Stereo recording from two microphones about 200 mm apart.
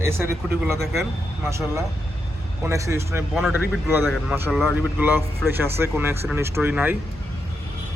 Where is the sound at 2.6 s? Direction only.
15° right (ahead or behind).